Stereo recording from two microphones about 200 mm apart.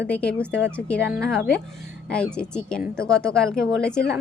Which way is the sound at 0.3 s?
55° left (ahead or behind).